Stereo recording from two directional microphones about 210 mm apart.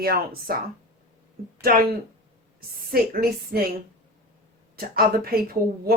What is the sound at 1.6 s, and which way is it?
Speech, 45° right (ahead or behind).